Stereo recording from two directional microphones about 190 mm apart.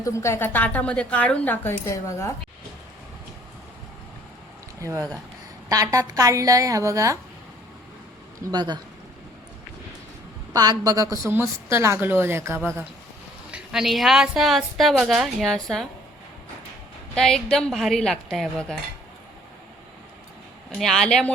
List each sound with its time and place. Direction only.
0.0 s speech: 15° left (ahead or behind)
4.8 s a woman's voice: 15° right (ahead or behind)
8.4 s speech: 20° right (ahead or behind)
10.5 s a woman's voice: 20° right (ahead or behind); by 15.9 s centre (ahead or behind)
17.2 s a woman's voice: 5° left (ahead or behind)
20.7 s a woman's voice: centre (ahead or behind)